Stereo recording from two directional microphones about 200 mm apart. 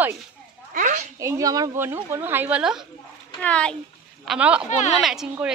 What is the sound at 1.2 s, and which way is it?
A woman's voice, 15° right (ahead or behind).